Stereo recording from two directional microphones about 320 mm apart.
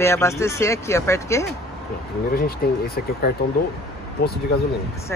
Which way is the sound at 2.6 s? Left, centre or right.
Left.